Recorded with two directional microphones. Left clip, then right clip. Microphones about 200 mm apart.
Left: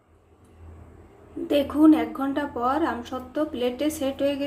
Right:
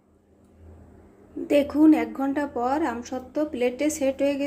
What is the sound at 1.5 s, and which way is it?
Speech, 20° right (ahead or behind).